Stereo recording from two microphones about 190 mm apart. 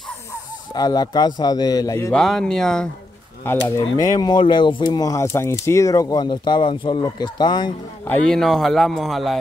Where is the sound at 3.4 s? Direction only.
15° left (ahead or behind).